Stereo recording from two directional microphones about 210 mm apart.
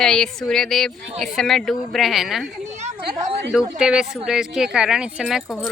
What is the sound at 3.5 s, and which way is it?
Speech, 5° right (ahead or behind).